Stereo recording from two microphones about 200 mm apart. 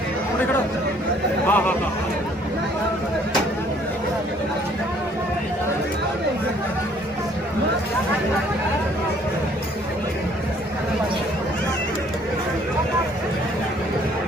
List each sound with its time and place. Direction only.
1.5 s speech: 10° left (ahead or behind)